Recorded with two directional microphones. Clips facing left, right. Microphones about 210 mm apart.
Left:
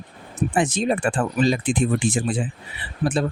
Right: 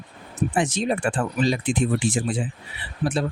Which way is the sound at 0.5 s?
50° left (ahead or behind).